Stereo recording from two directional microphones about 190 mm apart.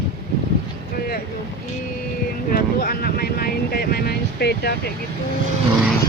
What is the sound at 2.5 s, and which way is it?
Vehicle, 50° left (ahead or behind).